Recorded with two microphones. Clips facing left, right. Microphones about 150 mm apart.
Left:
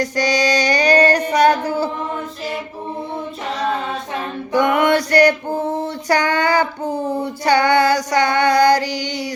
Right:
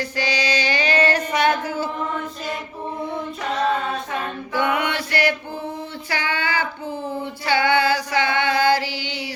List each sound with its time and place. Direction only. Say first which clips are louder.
0.0 s music: left 6 dB; 45° left (ahead or behind)
4.6 s male singing: left 7 dB; 45° left (ahead or behind)
6.1 s female singing: left 9 dB; 45° left (ahead or behind)